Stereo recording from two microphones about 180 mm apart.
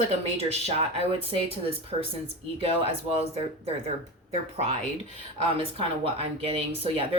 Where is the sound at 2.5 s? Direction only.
35° right (ahead or behind).